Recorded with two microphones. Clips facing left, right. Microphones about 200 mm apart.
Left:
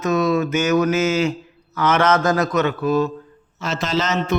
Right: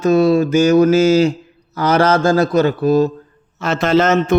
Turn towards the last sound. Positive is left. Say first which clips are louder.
# right 8 dB
turn(degrees=-50)  # may be behind; listen again after turning